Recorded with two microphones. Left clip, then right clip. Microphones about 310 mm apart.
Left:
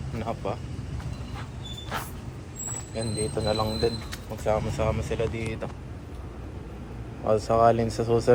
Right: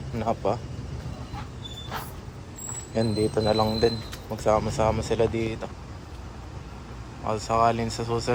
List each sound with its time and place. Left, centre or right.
0.2 s speech: centre
2.9 s speech: centre
7.3 s speech: centre